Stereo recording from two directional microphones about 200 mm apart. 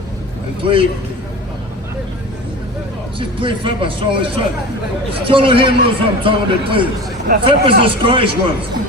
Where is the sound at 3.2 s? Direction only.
25° right (ahead or behind).